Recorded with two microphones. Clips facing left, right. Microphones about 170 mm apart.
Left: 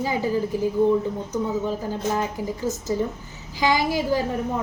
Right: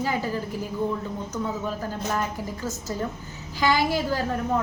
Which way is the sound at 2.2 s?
15° left (ahead or behind).